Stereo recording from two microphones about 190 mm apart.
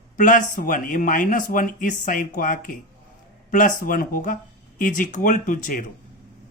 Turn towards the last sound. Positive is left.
turn(degrees=45)  # may be behind; listen again after turning